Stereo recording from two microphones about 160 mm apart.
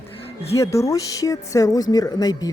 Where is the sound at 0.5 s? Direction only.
20° left (ahead or behind).